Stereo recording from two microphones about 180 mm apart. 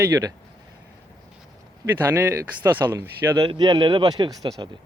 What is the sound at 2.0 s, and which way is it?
Speech, 10° right (ahead or behind).